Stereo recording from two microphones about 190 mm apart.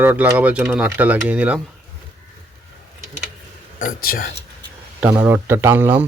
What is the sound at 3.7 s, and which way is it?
Speech, 45° left (ahead or behind).